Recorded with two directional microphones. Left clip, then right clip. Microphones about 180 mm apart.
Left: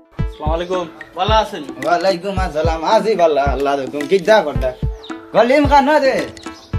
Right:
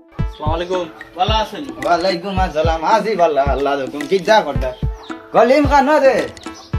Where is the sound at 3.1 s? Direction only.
10° left (ahead or behind).